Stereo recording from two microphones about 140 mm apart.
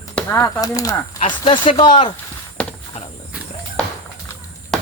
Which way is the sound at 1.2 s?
35° left (ahead or behind).